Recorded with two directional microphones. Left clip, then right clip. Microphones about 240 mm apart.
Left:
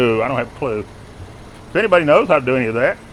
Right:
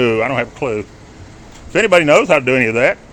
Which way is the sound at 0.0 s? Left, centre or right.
Centre.